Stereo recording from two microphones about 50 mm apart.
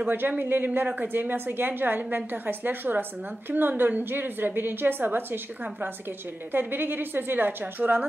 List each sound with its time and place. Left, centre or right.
0.0 s a woman's voice: right